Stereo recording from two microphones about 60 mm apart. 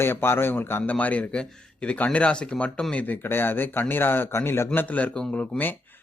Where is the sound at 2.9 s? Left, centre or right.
Left.